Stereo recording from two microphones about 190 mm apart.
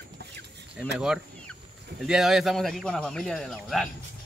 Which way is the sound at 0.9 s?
5° right (ahead or behind).